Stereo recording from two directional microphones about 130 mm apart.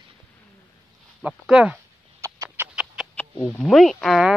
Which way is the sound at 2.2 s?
25° right (ahead or behind).